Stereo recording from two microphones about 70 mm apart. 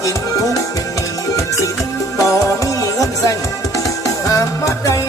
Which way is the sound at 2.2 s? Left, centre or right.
Left.